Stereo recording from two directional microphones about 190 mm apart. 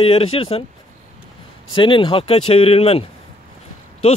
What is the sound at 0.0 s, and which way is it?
Speech, 30° left (ahead or behind).